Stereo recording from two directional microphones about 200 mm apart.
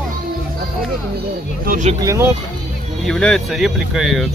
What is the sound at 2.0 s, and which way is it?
Speech, 15° right (ahead or behind).